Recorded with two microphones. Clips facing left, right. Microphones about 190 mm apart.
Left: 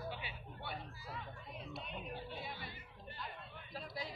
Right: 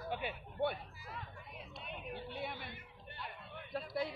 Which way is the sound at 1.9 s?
60° right (ahead or behind).